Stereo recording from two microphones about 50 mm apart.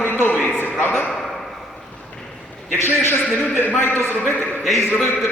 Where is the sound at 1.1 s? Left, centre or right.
Centre.